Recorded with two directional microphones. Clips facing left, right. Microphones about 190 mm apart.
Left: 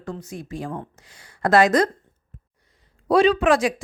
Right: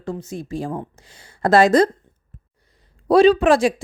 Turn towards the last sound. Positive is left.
turn(degrees=-30)  # may be behind; listen again after turning